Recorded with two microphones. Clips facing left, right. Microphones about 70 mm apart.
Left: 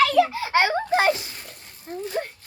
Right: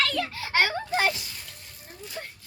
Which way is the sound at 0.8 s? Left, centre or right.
Left.